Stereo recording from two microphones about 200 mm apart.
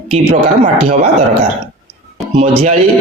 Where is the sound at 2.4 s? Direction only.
35° right (ahead or behind).